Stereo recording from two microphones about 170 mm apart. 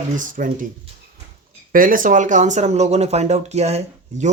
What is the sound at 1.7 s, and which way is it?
Speech, 55° right (ahead or behind).